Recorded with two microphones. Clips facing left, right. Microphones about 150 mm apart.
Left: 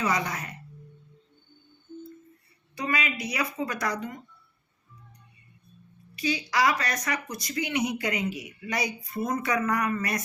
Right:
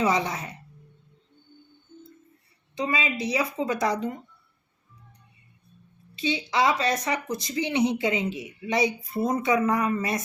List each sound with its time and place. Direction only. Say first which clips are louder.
0.0 s a woman's voice: right 4 dB; 25° right (ahead or behind)
2.7 s a woman's voice: right 2 dB; 25° right (ahead or behind)
6.1 s a woman's voice: right 2 dB; 25° right (ahead or behind)